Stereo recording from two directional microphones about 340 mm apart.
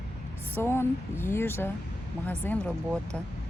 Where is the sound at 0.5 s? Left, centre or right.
Centre.